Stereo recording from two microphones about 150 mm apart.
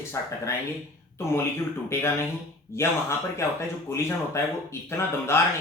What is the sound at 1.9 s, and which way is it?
Speech, 15° left (ahead or behind).